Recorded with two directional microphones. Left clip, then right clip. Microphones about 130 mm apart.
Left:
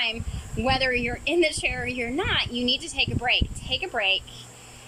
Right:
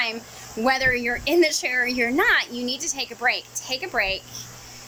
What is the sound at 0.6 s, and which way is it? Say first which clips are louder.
Speech: right 3 dB; 15° left (ahead or behind).